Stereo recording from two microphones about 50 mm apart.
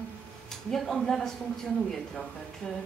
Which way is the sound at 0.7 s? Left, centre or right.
Centre.